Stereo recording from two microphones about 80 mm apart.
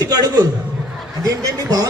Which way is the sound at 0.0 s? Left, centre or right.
Right.